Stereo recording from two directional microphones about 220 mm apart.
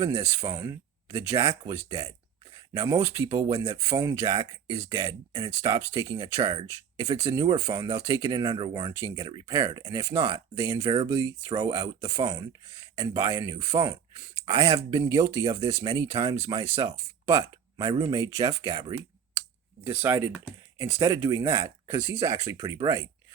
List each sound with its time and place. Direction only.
0.0 s speech: 15° right (ahead or behind)